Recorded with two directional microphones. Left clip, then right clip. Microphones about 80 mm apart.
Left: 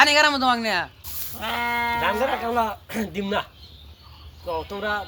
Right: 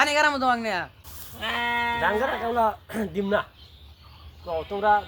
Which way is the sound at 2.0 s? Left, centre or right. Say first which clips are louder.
Left 1 dB; right.